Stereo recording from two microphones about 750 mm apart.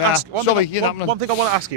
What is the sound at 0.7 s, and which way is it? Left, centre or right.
Speech, left.